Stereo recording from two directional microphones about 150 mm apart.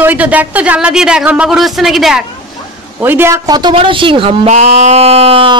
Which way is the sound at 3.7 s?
35° right (ahead or behind).